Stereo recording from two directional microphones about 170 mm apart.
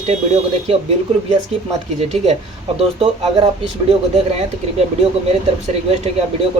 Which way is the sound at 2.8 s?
35° right (ahead or behind).